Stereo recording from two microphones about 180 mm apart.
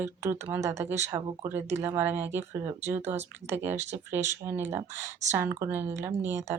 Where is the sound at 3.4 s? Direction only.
40° right (ahead or behind).